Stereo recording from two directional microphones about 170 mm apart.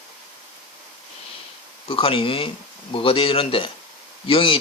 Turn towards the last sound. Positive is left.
turn(degrees=30)  # may be behind; listen again after turning